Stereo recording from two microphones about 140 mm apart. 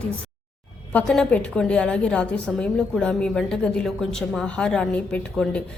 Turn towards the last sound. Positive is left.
turn(degrees=10)  # may be behind; listen again after turning